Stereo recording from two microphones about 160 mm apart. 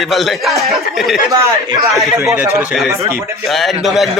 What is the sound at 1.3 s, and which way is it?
A man's voice, 20° right (ahead or behind).